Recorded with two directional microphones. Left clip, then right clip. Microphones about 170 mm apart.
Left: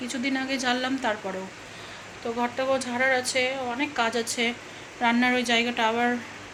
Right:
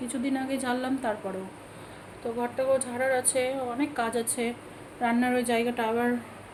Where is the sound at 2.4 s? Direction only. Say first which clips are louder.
Even; 5° right (ahead or behind).